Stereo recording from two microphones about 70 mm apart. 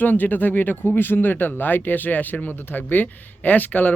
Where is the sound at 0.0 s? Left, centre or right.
Left.